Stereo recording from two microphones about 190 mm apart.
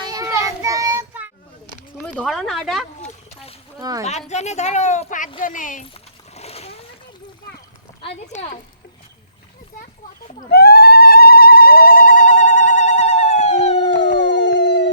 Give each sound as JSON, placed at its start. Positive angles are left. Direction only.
{"t": 0.1, "sound": "child singing", "side_deg": -20}
{"t": 2.0, "sound": "speech", "side_deg": 0}
{"t": 3.8, "sound": "speech", "side_deg": -20}
{"t": 4.3, "sound": "speech", "side_deg": 35}
{"t": 5.9, "sound": "splash", "side_deg": 35}
{"t": 8.0, "sound": "speech", "side_deg": 35}
{"t": 10.5, "sound": "a sound", "side_deg": 55}
{"t": 14.3, "sound": "howl", "side_deg": 70}